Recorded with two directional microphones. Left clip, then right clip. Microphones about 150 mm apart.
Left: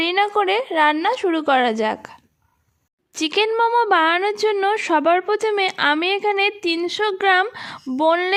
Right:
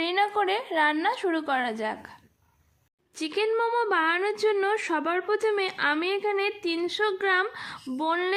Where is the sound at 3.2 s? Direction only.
55° left (ahead or behind).